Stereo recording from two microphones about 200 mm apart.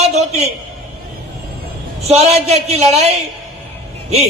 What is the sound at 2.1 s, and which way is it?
A man's voice, 30° right (ahead or behind).